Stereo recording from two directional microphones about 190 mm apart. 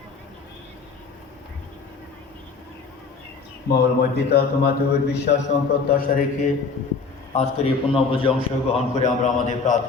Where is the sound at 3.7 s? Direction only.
55° left (ahead or behind).